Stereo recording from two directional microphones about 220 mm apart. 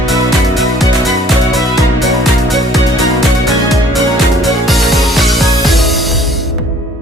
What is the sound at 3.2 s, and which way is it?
Music, centre (ahead or behind).